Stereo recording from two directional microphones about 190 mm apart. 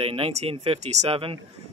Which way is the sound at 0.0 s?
30° right (ahead or behind).